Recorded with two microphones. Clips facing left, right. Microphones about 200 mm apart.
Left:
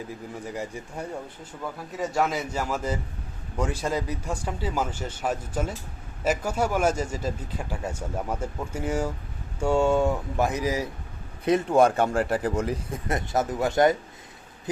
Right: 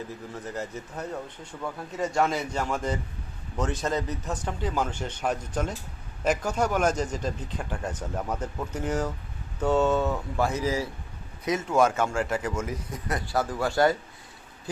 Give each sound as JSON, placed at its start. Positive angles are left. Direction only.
{"t": 0.4, "sound": "a man's voice", "side_deg": 15}
{"t": 1.6, "sound": "a man's voice", "side_deg": 5}
{"t": 11.7, "sound": "speech", "side_deg": 35}
{"t": 12.9, "sound": "speech", "side_deg": 25}